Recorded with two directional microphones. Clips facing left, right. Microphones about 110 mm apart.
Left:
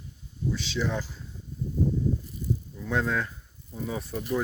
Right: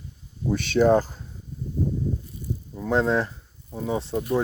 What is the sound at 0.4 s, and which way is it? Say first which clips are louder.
Speech: right 10 dB; 55° right (ahead or behind).